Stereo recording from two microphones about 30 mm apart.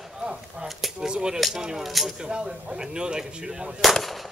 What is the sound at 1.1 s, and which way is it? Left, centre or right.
Speech, right.